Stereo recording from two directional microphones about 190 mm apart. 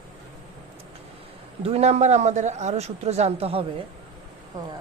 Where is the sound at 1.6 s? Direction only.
35° right (ahead or behind).